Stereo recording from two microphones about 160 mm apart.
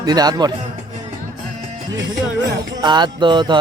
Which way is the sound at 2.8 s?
30° right (ahead or behind).